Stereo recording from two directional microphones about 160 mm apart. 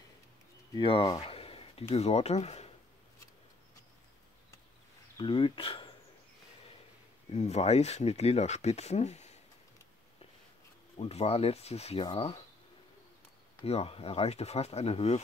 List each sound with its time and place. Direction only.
0.7 s speech: 35° left (ahead or behind)
5.1 s speech: 30° left (ahead or behind)
7.3 s speech: 45° left (ahead or behind)
11.0 s speech: 40° left (ahead or behind)
13.7 s speech: 40° left (ahead or behind)